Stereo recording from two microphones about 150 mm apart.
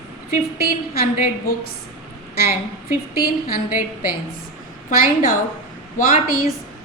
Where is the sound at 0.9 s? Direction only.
75° left (ahead or behind).